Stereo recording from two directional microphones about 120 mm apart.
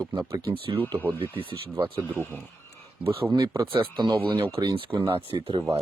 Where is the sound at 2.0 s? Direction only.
15° left (ahead or behind).